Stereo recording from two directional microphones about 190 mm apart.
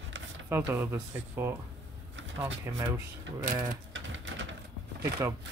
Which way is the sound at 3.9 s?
80° right.